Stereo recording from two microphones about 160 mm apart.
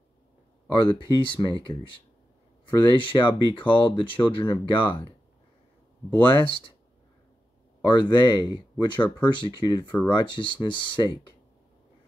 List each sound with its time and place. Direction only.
0.7 s speech: 30° left (ahead or behind)
6.3 s speech: 30° left (ahead or behind)
7.9 s speech: 30° left (ahead or behind)